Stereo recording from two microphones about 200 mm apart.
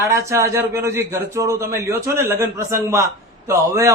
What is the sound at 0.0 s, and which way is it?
A man's voice, 15° right (ahead or behind).